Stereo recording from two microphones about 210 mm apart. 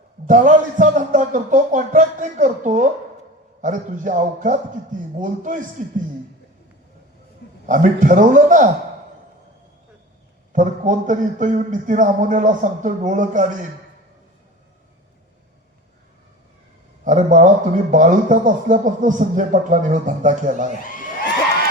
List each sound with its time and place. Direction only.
0.3 s speech: 40° right (ahead or behind)
7.7 s speech: 40° right (ahead or behind)
10.5 s speech: 35° right (ahead or behind)
17.0 s speech: 35° right (ahead or behind)
20.8 s crowd: 40° left (ahead or behind)